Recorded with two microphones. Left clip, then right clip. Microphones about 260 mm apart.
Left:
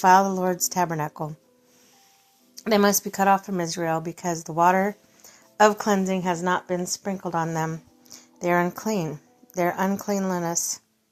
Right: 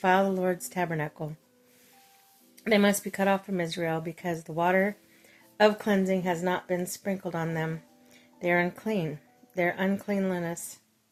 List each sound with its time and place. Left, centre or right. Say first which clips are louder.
0.0 s speech: left 7 dB; centre
2.8 s speech: left 5 dB; centre